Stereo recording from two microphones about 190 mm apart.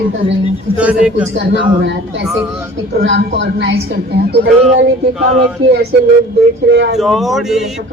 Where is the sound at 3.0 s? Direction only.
65° right (ahead or behind).